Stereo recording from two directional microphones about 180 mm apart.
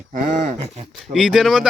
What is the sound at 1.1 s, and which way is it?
Speech, centre (ahead or behind).